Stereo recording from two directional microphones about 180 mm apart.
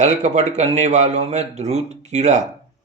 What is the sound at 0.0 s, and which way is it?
Speech, 40° right (ahead or behind).